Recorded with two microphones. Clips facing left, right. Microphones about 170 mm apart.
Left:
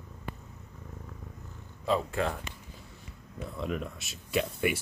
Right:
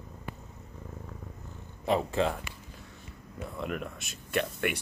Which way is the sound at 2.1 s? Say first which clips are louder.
Right 3 dB; 20° right (ahead or behind).